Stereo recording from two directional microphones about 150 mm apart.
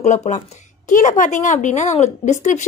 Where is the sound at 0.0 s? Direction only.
50° left (ahead or behind).